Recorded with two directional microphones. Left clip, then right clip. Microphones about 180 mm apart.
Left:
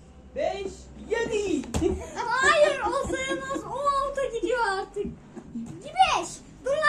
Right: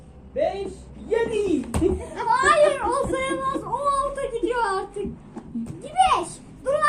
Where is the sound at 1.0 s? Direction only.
Centre (ahead or behind).